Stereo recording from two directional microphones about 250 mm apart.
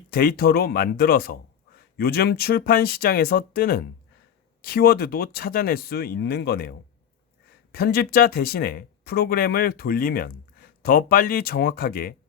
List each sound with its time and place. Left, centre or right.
0.1 s speech: left